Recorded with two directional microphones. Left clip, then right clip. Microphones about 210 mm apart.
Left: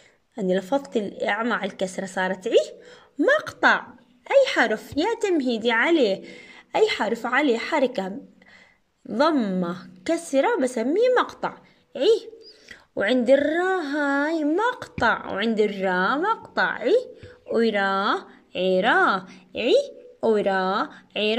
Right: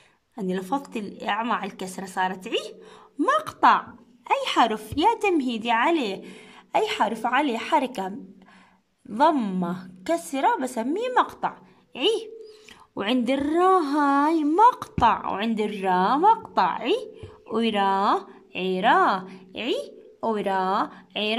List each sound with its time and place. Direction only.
0.4 s a woman's voice: 5° right (ahead or behind)
9.1 s a woman's voice: 10° right (ahead or behind)